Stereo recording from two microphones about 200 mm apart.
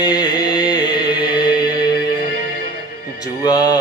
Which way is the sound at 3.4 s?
20° left (ahead or behind).